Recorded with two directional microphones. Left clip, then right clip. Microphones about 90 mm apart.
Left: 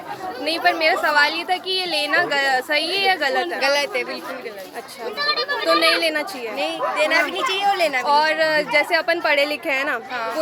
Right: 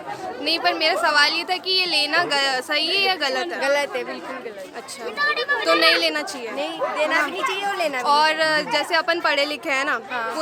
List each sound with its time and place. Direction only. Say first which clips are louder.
0.4 s a woman's voice: left 2 dB; 15° right (ahead or behind)
3.6 s speech: even; 45° right (ahead or behind)
5.2 s speech: right 1 dB; 10° left (ahead or behind)
5.8 s a woman's voice: even; 15° right (ahead or behind)
6.6 s a woman's voice: left 3 dB; 30° right (ahead or behind); by 10.0 s 5° right (ahead or behind)